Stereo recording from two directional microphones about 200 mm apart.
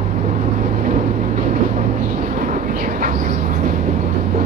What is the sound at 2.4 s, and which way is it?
Vehicle, 40° right (ahead or behind).